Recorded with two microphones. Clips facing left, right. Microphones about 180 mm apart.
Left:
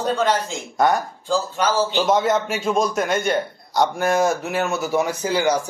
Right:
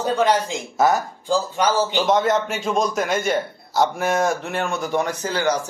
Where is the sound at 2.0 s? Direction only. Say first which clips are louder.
Even; centre (ahead or behind).